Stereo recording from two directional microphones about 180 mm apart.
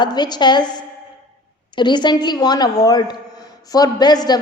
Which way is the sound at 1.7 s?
25° left (ahead or behind).